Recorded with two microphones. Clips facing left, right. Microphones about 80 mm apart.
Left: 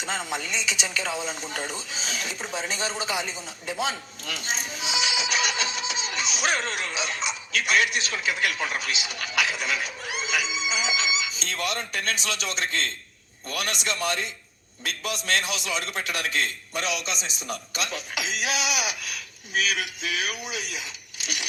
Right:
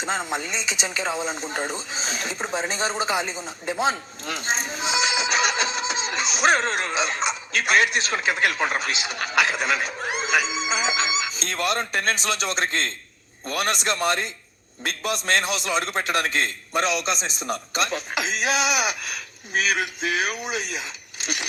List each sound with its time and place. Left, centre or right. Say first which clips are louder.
0.0 s speech: right 4 dB; right